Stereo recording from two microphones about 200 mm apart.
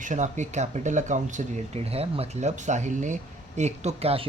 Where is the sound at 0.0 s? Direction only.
40° right (ahead or behind).